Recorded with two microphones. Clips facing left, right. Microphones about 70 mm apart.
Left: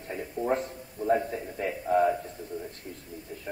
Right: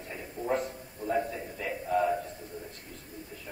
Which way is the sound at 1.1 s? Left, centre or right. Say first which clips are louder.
Left 4 dB; left.